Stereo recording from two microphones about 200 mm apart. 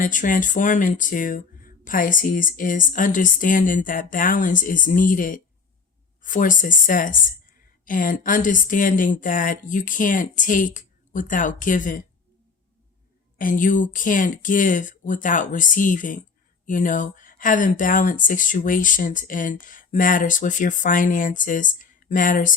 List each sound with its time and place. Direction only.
0.0 s speech: 40° left (ahead or behind)
13.4 s speech: 40° left (ahead or behind)